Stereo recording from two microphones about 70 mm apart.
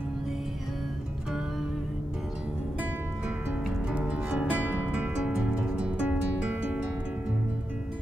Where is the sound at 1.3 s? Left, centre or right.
Centre.